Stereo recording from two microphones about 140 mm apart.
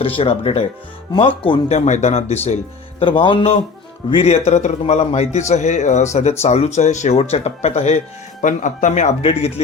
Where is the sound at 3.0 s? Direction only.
35° left (ahead or behind).